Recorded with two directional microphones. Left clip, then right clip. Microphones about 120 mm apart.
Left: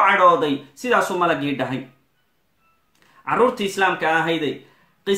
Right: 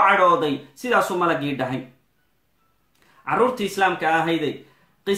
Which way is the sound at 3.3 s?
20° left (ahead or behind).